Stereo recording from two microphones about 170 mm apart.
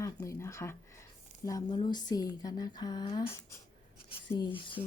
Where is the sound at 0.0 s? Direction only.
15° left (ahead or behind).